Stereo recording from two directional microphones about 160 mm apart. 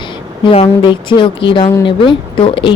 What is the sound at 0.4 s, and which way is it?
Speech, 35° left (ahead or behind).